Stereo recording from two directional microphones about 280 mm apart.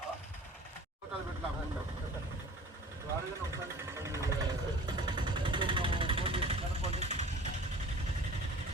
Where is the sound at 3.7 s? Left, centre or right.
Centre.